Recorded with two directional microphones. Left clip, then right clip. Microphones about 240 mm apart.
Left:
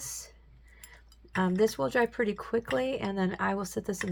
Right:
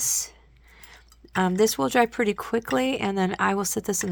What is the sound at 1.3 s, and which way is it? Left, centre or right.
Speech, right.